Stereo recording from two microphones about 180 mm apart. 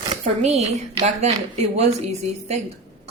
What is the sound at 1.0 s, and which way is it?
A woman's voice, 35° right (ahead or behind).